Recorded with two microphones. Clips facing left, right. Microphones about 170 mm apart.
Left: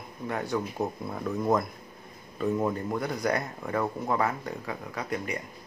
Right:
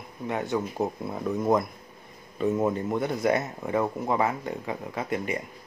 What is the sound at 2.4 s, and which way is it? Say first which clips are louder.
Speech: right 3 dB; 5° right (ahead or behind).